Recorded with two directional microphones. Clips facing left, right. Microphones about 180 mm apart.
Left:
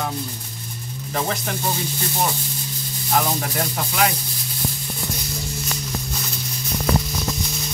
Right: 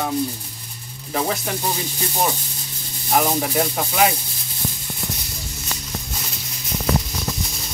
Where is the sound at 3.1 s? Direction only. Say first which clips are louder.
Right 3 dB; 10° right (ahead or behind).